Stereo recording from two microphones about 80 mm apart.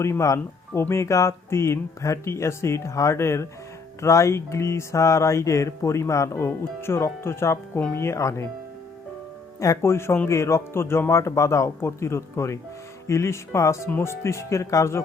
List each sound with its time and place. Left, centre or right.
0.0 s music: left
9.6 s music: left